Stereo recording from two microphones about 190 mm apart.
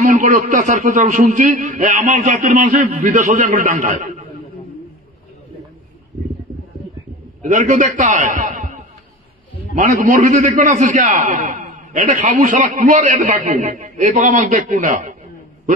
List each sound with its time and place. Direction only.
0.0 s a man's voice: 40° right (ahead or behind)
7.4 s a man's voice: 40° right (ahead or behind)